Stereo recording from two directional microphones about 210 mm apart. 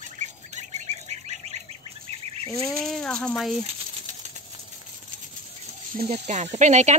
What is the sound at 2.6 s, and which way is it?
Speech, centre (ahead or behind).